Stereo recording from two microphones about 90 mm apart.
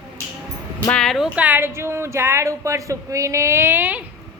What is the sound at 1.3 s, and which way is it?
Speech, 20° right (ahead or behind).